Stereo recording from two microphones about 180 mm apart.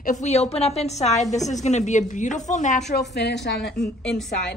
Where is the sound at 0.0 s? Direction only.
40° left (ahead or behind).